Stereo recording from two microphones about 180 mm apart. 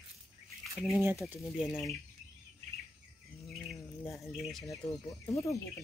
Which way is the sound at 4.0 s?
Centre (ahead or behind).